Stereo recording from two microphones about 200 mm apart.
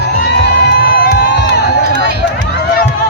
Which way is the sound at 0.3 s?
55° left (ahead or behind).